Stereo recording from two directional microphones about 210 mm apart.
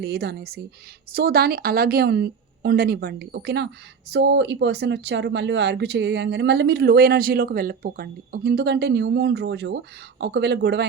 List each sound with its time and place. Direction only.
0.0 s speech: 50° right (ahead or behind)